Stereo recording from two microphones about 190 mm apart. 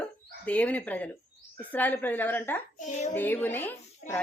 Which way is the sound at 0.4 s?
5° left (ahead or behind).